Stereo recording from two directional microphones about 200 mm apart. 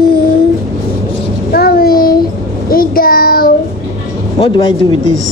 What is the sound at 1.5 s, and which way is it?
Child singing, 50° left (ahead or behind).